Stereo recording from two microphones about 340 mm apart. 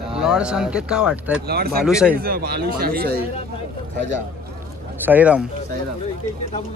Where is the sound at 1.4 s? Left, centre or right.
Right.